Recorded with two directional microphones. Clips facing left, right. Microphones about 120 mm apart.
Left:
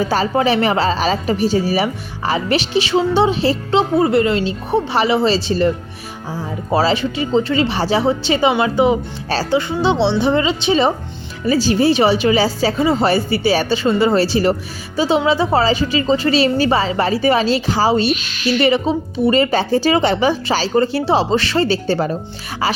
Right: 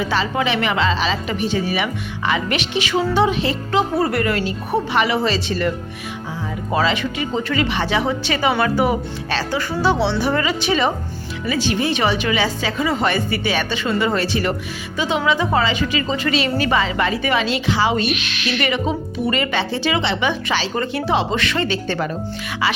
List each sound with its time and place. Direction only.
0.0 s a woman's voice: 40° left (ahead or behind)